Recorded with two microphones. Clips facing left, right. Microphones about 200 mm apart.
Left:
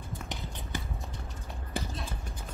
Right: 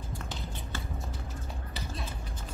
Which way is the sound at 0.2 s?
15° left (ahead or behind).